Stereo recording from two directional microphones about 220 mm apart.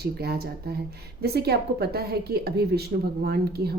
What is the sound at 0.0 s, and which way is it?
Speech, 45° right (ahead or behind).